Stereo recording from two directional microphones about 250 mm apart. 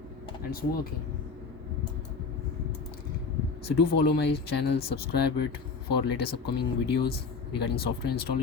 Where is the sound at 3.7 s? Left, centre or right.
Left.